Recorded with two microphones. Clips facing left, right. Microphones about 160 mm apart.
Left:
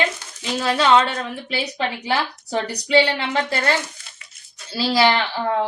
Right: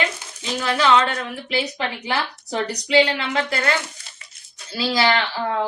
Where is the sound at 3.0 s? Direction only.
30° left (ahead or behind).